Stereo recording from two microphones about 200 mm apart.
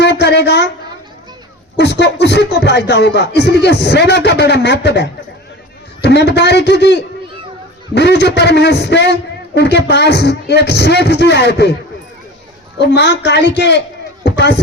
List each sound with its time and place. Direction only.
0.0 s speech: 55° left (ahead or behind)
1.7 s speech: 55° left (ahead or behind)
12.8 s speech: 55° left (ahead or behind)
14.3 s a sound: 55° left (ahead or behind)